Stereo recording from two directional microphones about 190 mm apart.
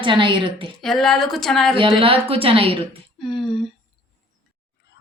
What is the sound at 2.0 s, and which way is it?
Speech, 30° right (ahead or behind).